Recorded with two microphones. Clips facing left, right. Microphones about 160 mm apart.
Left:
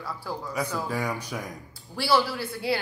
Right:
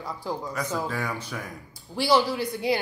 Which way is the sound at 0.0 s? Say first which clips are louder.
Right 2 dB; 15° right (ahead or behind).